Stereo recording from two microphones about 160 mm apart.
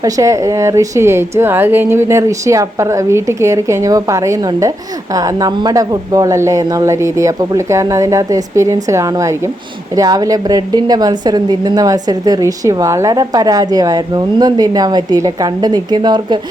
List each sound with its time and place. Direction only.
0.0 s a woman's voice: 20° right (ahead or behind)